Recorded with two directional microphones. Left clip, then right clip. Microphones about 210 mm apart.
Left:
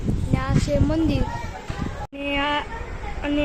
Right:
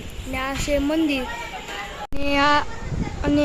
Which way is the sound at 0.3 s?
5° right (ahead or behind).